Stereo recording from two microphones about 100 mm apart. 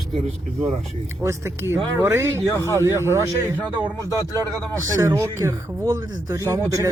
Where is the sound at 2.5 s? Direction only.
30° left (ahead or behind).